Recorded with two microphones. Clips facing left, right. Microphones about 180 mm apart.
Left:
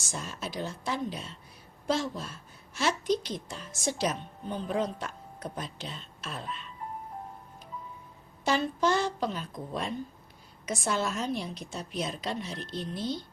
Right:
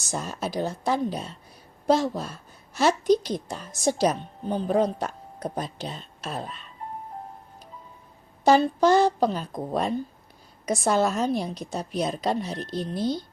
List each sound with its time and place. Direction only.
0.1 s a woman's voice: 40° right (ahead or behind)
8.4 s a woman's voice: 40° right (ahead or behind)